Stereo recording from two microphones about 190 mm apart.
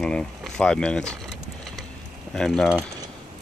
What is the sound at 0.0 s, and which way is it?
Speech, 5° left (ahead or behind).